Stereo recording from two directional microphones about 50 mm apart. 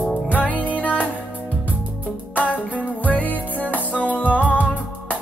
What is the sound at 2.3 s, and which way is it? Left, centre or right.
Music, left.